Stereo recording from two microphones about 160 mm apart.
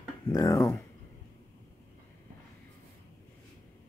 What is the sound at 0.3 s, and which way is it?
Speech, 20° left (ahead or behind).